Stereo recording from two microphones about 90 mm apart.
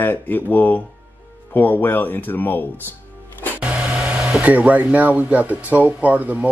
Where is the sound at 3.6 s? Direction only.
10° right (ahead or behind).